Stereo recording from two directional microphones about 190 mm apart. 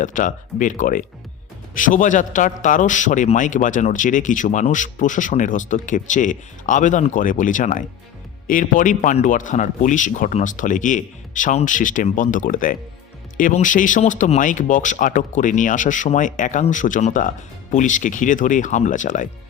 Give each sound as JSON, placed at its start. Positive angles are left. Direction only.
{"t": 0.0, "sound": "a man's voice", "side_deg": 40}